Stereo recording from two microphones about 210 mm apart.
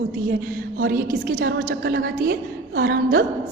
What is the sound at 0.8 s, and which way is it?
A woman's voice, 45° right (ahead or behind).